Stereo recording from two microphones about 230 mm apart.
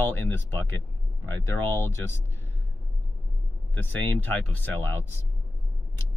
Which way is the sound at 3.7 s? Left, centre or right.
Centre.